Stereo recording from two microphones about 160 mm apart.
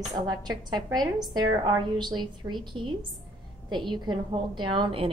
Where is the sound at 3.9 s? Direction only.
30° right (ahead or behind).